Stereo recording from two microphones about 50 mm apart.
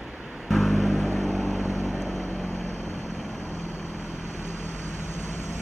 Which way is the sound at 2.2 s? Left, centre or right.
Left.